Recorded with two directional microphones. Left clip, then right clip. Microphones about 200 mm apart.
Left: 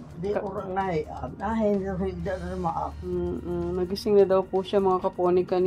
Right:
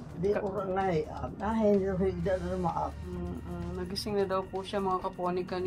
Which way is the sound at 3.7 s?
30° left (ahead or behind).